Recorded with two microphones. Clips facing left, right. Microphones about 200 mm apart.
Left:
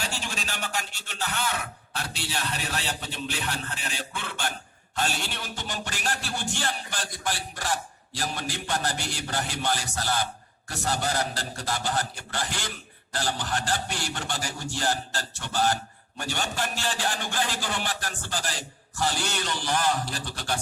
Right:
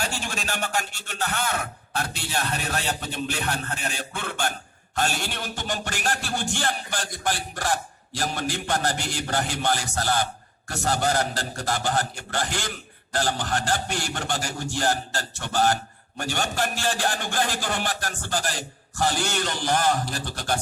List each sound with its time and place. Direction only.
0.0 s a man's voice: 50° right (ahead or behind)